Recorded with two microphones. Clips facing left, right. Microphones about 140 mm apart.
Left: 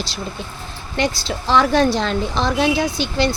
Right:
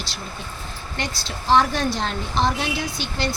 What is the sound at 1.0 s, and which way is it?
Speech, 90° left.